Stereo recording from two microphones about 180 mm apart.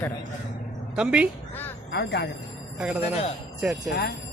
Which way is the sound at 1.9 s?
65° left (ahead or behind).